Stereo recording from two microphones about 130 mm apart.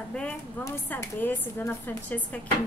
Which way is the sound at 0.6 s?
20° left (ahead or behind).